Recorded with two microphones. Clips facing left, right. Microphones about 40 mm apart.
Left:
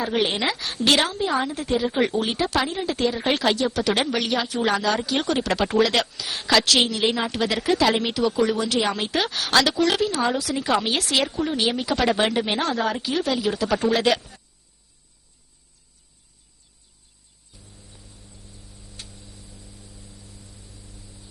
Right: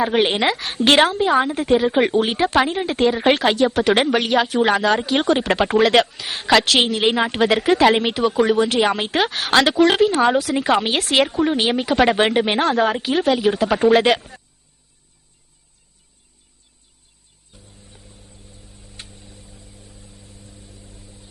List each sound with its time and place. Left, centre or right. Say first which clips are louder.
0.1 s a woman's voice: right 5 dB; right
17.5 s music: right 3 dB; right
18.7 s vehicle: right 2 dB; right